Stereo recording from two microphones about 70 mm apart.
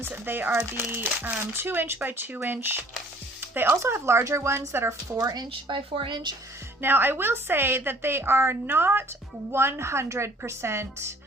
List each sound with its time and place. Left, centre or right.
0.0 s a woman's voice: right
5.2 s a woman's voice: right
6.8 s a woman's voice: right